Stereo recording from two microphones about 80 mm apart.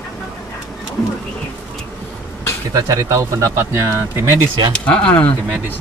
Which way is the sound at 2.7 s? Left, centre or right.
Right.